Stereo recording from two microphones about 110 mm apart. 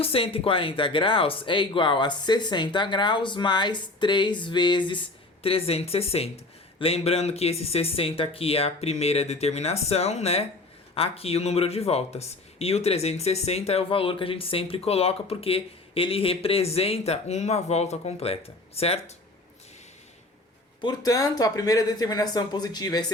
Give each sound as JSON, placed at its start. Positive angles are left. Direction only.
{"t": 0.0, "sound": "speech", "side_deg": 60}
{"t": 10.9, "sound": "speech", "side_deg": 65}
{"t": 20.8, "sound": "speech", "side_deg": 35}